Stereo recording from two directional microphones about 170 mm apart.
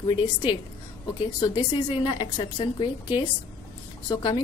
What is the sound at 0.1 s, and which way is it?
A woman's voice, 30° left (ahead or behind).